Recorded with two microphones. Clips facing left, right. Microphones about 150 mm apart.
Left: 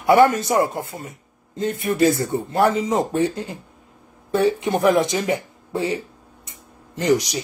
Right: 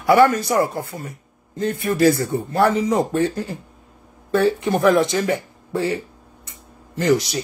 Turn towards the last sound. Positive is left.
turn(degrees=20)  # may be behind; listen again after turning